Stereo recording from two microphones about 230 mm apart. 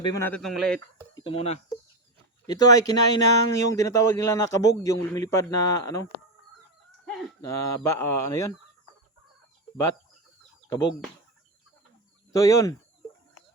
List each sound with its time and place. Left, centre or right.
0.0 s speech: centre
1.1 s speech: left
2.5 s speech: centre
7.0 s chicken: centre
7.4 s speech: centre
12.3 s speech: centre